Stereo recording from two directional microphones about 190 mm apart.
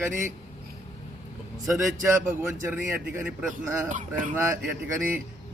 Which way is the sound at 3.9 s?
45° right (ahead or behind).